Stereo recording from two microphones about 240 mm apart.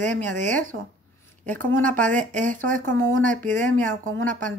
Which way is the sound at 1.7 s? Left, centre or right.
Centre.